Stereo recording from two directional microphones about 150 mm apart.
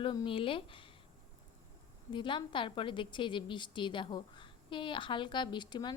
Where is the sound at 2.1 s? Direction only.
35° left (ahead or behind).